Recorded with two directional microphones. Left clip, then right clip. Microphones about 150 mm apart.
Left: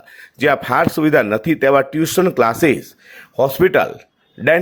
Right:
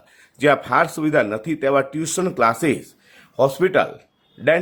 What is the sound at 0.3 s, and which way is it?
Speech, 35° left (ahead or behind).